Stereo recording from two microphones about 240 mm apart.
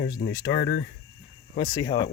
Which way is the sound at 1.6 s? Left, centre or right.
Centre.